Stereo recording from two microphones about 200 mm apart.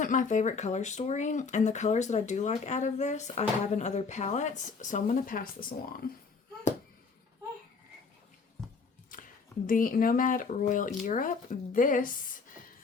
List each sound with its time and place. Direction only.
0.0 s speech: 40° left (ahead or behind)
9.1 s a sound: 40° left (ahead or behind)
9.6 s speech: 45° left (ahead or behind)